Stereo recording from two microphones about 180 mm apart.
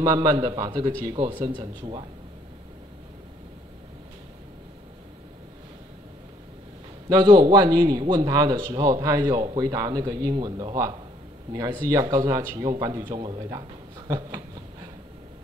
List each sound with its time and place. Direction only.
0.0 s a man's voice: 25° right (ahead or behind)
7.1 s a man's voice: 25° right (ahead or behind)
13.4 s a sound: 20° right (ahead or behind)